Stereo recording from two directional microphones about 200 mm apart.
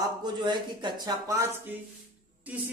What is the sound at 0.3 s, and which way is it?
Speech, 20° right (ahead or behind).